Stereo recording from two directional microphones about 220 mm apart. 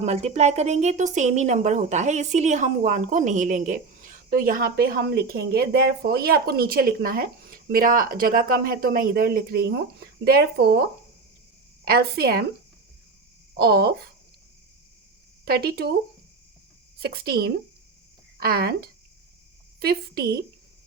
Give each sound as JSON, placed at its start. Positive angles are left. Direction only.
{"t": 0.0, "sound": "a woman's voice", "side_deg": -30}
{"t": 11.9, "sound": "speech", "side_deg": -45}
{"t": 13.6, "sound": "speech", "side_deg": -45}
{"t": 15.4, "sound": "speech", "side_deg": -45}
{"t": 17.0, "sound": "speech", "side_deg": -45}